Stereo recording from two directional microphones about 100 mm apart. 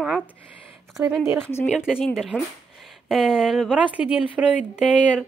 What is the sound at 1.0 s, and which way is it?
Speech, 30° right (ahead or behind).